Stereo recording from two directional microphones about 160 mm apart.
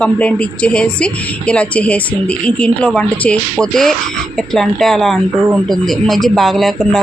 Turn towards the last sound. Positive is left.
turn(degrees=0)  # may be behind; listen again after turning